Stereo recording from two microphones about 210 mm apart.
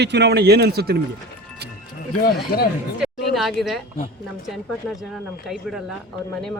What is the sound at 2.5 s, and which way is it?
Speech, 45° left (ahead or behind).